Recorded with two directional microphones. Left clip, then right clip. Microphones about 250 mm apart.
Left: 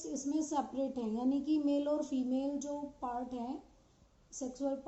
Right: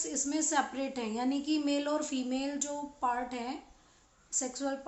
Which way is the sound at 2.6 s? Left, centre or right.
Right.